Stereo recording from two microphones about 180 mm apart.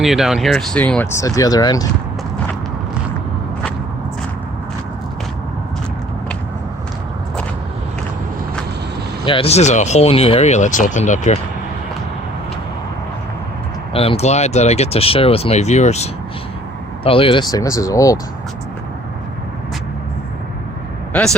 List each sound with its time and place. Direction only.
0.0 s speech: centre (ahead or behind)
1.2 s speech: 20° left (ahead or behind)
9.2 s speech: 30° left (ahead or behind)
13.9 s speech: 30° left (ahead or behind)
21.1 s speech: 5° left (ahead or behind)